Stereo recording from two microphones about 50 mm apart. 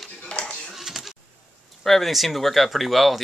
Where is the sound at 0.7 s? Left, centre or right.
Centre.